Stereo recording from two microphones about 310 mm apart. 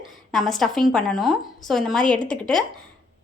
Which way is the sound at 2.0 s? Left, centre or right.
Left.